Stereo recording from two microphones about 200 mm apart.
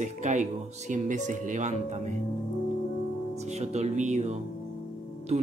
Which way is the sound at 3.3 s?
35° right (ahead or behind).